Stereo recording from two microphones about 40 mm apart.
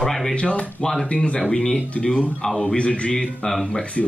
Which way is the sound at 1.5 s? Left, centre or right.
Centre.